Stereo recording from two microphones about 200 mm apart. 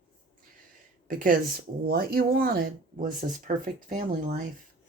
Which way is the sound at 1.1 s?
45° right (ahead or behind).